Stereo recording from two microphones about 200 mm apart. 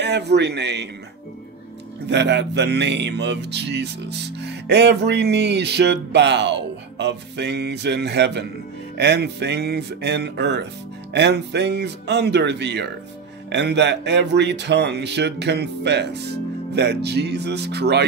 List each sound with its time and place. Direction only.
0.0 s music: 55° right (ahead or behind)
2.0 s music: 60° right (ahead or behind)